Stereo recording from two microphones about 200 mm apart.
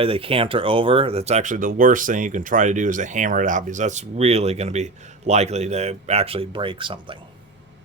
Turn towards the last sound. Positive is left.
turn(degrees=-25)  # may be behind; listen again after turning